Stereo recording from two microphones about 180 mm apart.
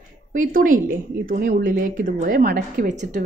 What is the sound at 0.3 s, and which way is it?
A woman's voice, 45° right (ahead or behind).